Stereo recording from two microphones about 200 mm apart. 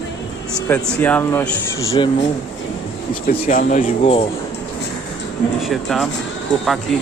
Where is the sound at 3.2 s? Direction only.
40° left (ahead or behind).